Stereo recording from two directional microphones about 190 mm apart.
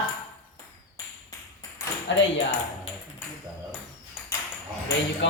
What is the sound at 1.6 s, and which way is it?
Ping, 15° left (ahead or behind).